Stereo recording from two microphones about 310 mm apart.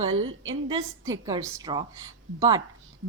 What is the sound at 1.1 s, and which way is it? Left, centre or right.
A woman's voice, centre.